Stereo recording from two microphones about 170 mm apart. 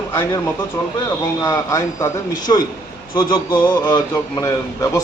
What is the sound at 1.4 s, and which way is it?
Speech, 20° left (ahead or behind).